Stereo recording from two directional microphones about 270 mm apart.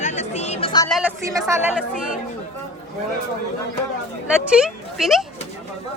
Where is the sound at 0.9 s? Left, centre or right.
Centre.